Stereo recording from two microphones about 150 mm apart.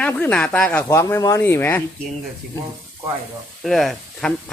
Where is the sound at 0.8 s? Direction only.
20° left (ahead or behind).